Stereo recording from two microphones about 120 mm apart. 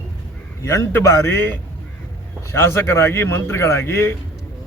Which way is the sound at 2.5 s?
20° left (ahead or behind).